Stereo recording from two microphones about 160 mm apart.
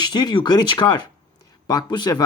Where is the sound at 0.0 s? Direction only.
25° left (ahead or behind).